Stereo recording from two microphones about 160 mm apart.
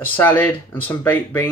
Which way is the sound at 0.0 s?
10° left (ahead or behind).